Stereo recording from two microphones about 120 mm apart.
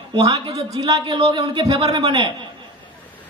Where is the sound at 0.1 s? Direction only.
35° right (ahead or behind).